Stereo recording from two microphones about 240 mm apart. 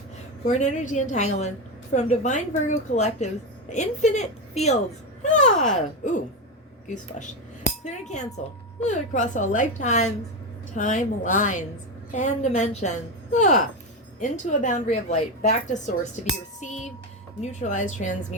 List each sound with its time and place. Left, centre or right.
0.4 s a woman's voice: left
16.6 s a sound: left
17.4 s a woman's voice: left